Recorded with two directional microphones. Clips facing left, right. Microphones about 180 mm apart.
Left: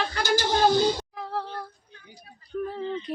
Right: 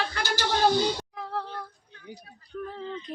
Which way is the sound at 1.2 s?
Centre (ahead or behind).